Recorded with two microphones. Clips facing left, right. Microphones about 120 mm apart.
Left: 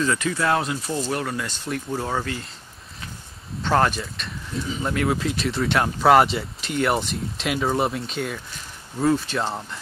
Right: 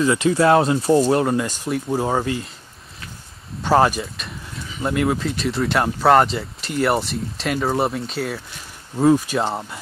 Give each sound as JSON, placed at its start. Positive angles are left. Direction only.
{"t": 0.0, "sound": "speech", "side_deg": -20}
{"t": 1.4, "sound": "speech", "side_deg": -10}
{"t": 3.6, "sound": "speech", "side_deg": -10}
{"t": 8.9, "sound": "speech", "side_deg": -15}
{"t": 9.4, "sound": "speech", "side_deg": -25}